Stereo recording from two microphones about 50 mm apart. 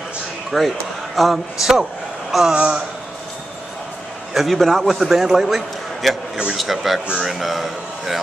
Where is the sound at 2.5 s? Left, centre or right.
Right.